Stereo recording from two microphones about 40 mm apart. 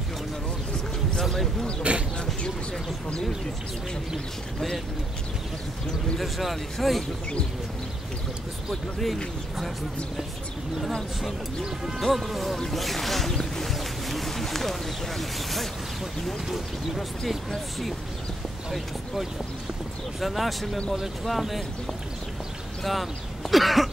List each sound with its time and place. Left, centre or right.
1.2 s a sound: centre
1.8 s speech: right
6.1 s speech: centre
8.6 s speech: centre
12.0 s speech: centre
13.4 s a sound: centre
16.4 s speech: centre
20.2 s speech: centre
22.8 s speech: centre